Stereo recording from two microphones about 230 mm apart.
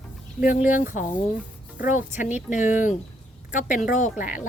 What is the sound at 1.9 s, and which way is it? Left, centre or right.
Speech, left.